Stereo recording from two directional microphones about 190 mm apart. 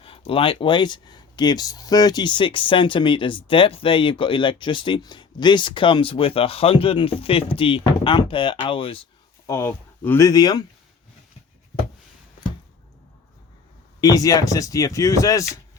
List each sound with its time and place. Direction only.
0.0 s speech: 30° left (ahead or behind)
9.5 s speech: 15° left (ahead or behind)
14.0 s speech: 20° left (ahead or behind)